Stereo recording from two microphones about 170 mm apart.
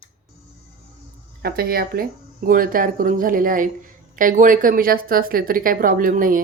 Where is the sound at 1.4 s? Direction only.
60° right (ahead or behind).